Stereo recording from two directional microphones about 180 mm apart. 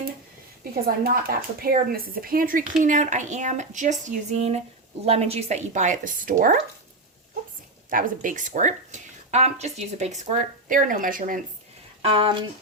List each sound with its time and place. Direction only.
0.6 s a woman's voice: 55° right (ahead or behind)
7.9 s speech: 50° right (ahead or behind)
12.0 s speech: 30° right (ahead or behind)